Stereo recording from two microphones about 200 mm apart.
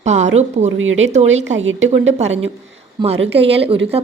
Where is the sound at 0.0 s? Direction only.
35° right (ahead or behind).